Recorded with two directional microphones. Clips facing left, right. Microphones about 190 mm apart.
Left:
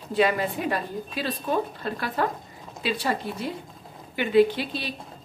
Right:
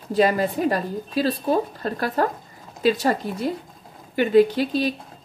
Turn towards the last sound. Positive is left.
turn(degrees=-45)  # may be behind; listen again after turning